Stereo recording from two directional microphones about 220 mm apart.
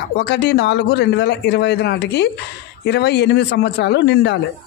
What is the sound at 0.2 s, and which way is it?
Speech, 50° left (ahead or behind).